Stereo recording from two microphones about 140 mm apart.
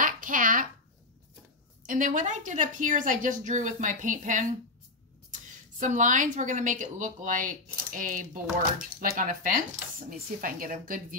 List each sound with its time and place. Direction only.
0.0 s a sound: 70° right (ahead or behind)
1.9 s a woman's voice: 70° right (ahead or behind)
8.7 s speech: 85° right